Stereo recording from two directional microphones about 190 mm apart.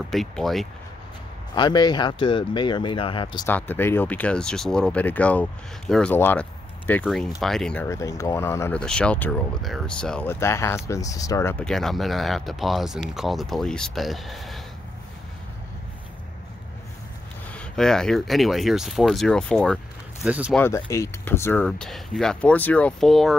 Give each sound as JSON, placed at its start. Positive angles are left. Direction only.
{"t": 0.1, "sound": "speech", "side_deg": 0}
{"t": 1.5, "sound": "speech", "side_deg": 25}
{"t": 3.4, "sound": "speech", "side_deg": 10}
{"t": 17.5, "sound": "speech", "side_deg": 5}
{"t": 20.5, "sound": "speech", "side_deg": 15}